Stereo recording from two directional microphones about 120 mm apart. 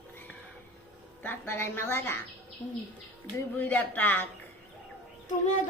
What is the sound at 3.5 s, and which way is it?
Speech, 15° left (ahead or behind).